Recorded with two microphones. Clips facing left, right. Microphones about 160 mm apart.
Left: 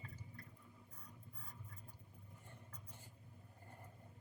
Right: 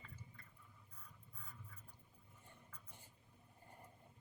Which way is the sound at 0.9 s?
35° left (ahead or behind).